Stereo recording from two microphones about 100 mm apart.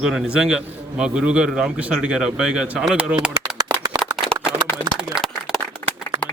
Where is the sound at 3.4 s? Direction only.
40° right (ahead or behind).